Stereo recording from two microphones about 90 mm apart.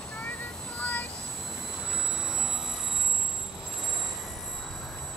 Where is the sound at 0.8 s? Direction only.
20° left (ahead or behind).